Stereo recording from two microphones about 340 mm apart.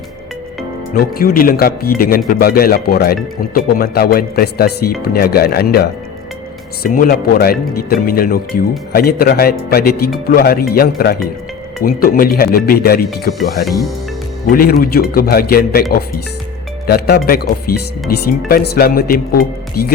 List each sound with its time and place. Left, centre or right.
0.9 s speech: left